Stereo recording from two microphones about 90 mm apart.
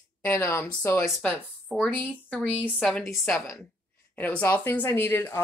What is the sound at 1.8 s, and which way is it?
Speech, 20° left (ahead or behind).